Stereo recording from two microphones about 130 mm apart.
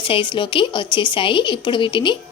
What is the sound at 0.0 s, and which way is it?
A woman's voice, 40° left (ahead or behind).